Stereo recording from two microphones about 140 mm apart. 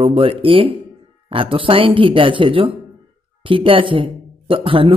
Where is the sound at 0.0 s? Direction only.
40° right (ahead or behind).